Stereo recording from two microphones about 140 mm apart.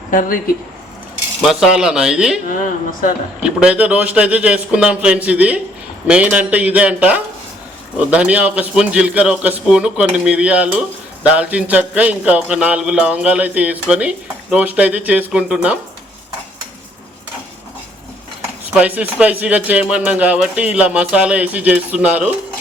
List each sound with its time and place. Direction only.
0.1 s speech: 80° left
1.4 s speech: 5° right (ahead or behind)
3.4 s a man's voice: 5° right (ahead or behind)
18.7 s a man's voice: 10° right (ahead or behind)